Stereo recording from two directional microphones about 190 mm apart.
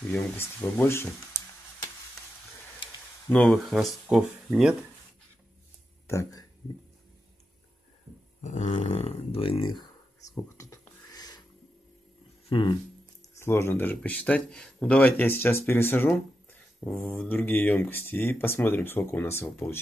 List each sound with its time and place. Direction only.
0.1 s speech: 10° left (ahead or behind)
3.3 s speech: 10° left (ahead or behind)
3.5 s speech: centre (ahead or behind)
6.0 s speech: 15° left (ahead or behind)
8.4 s speech: 40° left (ahead or behind)
10.3 s a sound: 15° left (ahead or behind)
12.4 s speech: 25° left (ahead or behind)
13.4 s speech: 15° left (ahead or behind)